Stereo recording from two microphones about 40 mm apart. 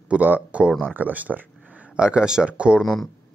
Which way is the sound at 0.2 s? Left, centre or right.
Right.